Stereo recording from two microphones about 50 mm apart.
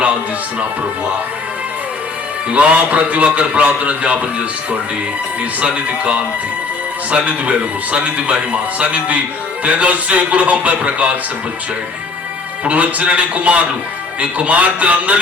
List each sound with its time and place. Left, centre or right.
2.5 s a man's voice: right
12.6 s a man's voice: right